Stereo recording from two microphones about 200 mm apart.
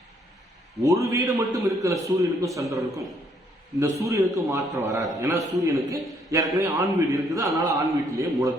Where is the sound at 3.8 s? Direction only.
15° right (ahead or behind).